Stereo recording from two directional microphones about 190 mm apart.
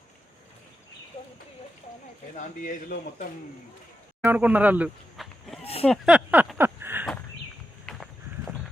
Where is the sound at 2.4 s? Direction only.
45° left (ahead or behind).